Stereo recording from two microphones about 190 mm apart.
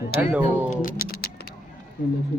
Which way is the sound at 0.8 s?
50° left (ahead or behind).